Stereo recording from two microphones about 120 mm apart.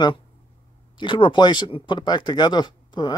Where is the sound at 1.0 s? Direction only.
40° left (ahead or behind).